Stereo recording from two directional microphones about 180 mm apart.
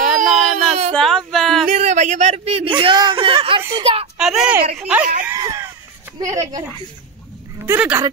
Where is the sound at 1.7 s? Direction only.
40° right (ahead or behind).